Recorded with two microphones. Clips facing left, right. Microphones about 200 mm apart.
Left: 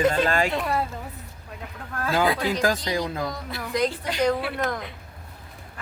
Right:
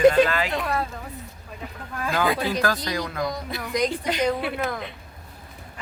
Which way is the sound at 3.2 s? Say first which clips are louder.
Right 2 dB; 15° right (ahead or behind).